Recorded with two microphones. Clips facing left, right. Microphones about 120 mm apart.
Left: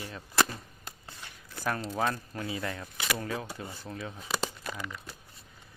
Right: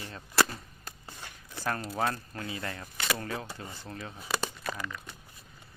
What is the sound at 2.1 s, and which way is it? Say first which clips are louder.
Speech: left 3 dB; 15° left (ahead or behind).